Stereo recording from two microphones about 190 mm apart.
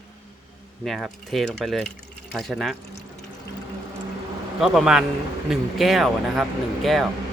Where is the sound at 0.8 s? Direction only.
Centre (ahead or behind).